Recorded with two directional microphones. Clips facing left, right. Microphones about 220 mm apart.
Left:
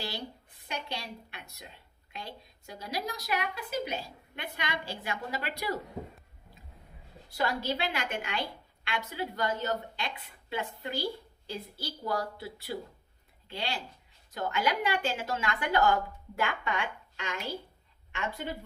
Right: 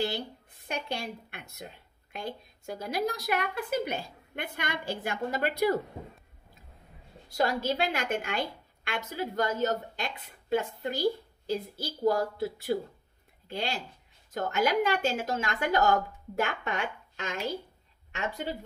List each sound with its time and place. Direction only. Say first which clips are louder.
0.7 s a woman's voice: right 4 dB; 50° right (ahead or behind)
7.2 s a woman's voice: right 3 dB; 45° right (ahead or behind)